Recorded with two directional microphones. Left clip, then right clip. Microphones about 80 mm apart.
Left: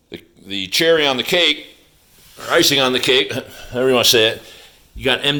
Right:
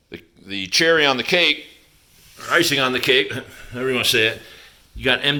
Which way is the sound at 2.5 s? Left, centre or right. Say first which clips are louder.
Left 3 dB; left.